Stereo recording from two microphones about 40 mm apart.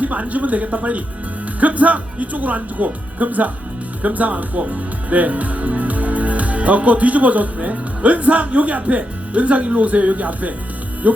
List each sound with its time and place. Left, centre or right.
0.0 s speech: right